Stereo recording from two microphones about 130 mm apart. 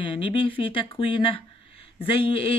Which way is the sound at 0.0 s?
40° left (ahead or behind).